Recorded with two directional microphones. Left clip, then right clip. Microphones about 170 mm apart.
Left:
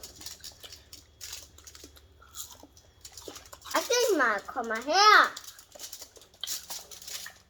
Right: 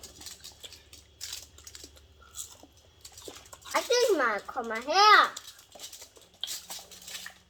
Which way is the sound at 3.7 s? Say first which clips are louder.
Right 1 dB; 20° left (ahead or behind).